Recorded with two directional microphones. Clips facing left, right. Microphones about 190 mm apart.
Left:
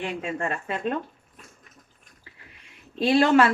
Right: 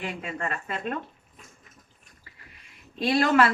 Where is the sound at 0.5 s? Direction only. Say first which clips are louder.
Left 4 dB; 30° left (ahead or behind).